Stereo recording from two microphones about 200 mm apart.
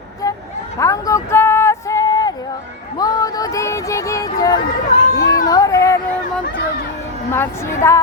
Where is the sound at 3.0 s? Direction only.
20° left (ahead or behind).